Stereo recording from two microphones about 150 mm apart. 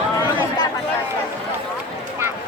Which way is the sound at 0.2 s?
30° left (ahead or behind).